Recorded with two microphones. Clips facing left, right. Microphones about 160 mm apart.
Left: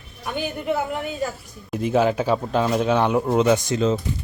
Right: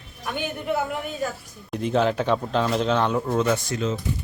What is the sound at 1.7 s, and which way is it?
A man's voice, 5° left (ahead or behind).